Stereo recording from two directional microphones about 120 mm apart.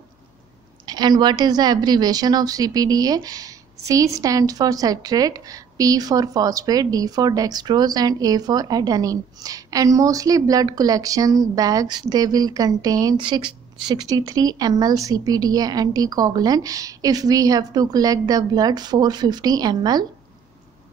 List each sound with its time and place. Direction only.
0.8 s a woman's voice: 35° right (ahead or behind)
13.2 s a woman's voice: 45° right (ahead or behind)